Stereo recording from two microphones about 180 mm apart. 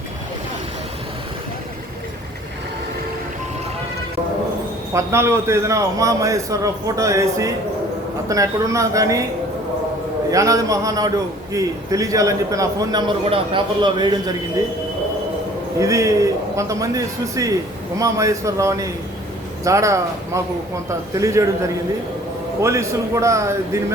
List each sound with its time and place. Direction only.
4.9 s a man's voice: 15° right (ahead or behind)
10.3 s a man's voice: 20° right (ahead or behind)
15.8 s a man's voice: 15° right (ahead or behind)
22.6 s a man's voice: 15° right (ahead or behind)